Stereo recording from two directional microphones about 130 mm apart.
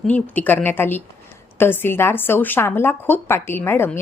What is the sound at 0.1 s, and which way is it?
A woman's voice, 15° left (ahead or behind).